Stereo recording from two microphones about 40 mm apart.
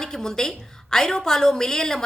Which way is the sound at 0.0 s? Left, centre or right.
Centre.